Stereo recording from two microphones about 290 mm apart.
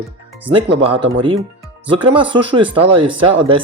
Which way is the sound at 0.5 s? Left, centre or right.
Centre.